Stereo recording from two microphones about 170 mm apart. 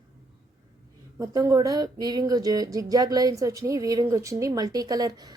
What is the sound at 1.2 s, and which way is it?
Speech, 20° right (ahead or behind).